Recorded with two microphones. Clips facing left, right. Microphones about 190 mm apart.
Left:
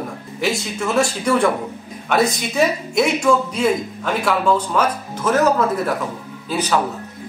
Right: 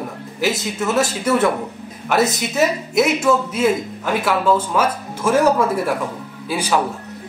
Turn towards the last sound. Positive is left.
turn(degrees=-10)  # may be behind; listen again after turning